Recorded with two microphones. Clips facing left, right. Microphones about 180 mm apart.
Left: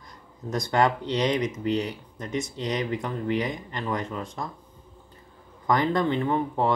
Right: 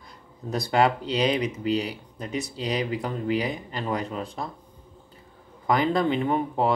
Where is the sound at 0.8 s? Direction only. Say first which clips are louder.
Right 1 dB; 30° right (ahead or behind).